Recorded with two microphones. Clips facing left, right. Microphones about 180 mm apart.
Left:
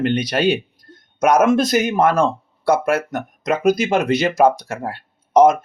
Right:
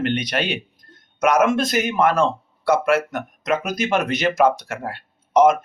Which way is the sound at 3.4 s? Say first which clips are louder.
Left 6 dB; 30° left (ahead or behind).